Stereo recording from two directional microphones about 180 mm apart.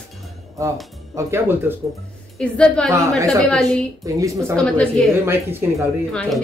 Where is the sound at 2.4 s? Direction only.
5° left (ahead or behind).